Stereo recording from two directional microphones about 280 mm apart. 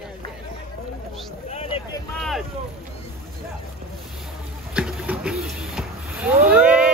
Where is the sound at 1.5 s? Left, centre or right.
Centre.